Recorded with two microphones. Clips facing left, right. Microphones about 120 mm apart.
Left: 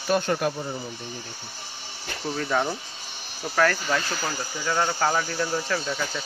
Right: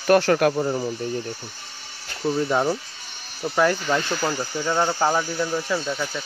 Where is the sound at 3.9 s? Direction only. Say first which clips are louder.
Right 4 dB; 15° right (ahead or behind).